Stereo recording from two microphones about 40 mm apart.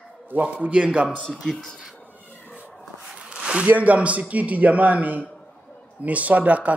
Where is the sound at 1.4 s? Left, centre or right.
Centre.